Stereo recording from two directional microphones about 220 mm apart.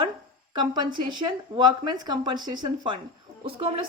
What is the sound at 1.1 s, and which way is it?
A woman's voice, 20° right (ahead or behind).